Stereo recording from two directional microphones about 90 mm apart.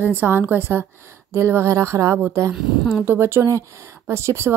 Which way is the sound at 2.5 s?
5° right (ahead or behind).